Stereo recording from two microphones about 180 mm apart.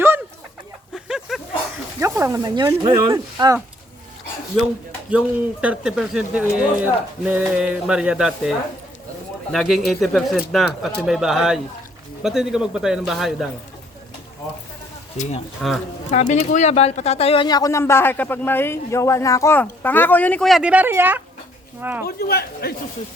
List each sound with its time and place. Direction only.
0.9 s a sound: 5° right (ahead or behind)
2.0 s speech: 15° right (ahead or behind)
5.1 s speech: 5° right (ahead or behind)
15.6 s speech: centre (ahead or behind)
16.1 s speech: 40° left (ahead or behind); by 22.0 s 10° right (ahead or behind)
22.0 s speech: 60° left (ahead or behind)